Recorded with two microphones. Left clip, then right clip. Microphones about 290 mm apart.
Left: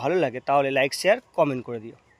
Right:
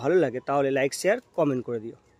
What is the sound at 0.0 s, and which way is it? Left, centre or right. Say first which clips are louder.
Speech: even; centre.